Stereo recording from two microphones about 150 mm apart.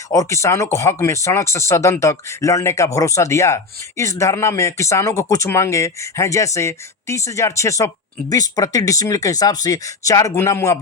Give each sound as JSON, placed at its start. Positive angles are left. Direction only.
{"t": 0.1, "sound": "speech", "side_deg": 20}